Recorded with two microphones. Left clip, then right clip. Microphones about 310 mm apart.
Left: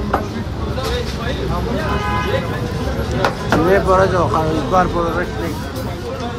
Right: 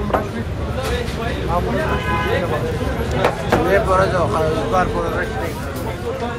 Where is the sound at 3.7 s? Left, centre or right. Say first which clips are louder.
Left 3 dB; left.